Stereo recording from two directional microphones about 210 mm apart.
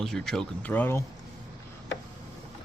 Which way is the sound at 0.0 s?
Centre (ahead or behind).